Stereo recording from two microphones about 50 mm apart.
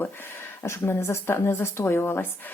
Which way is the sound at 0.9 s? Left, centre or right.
Left.